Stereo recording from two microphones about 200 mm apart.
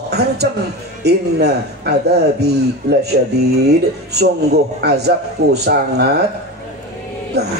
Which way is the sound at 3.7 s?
55° right (ahead or behind).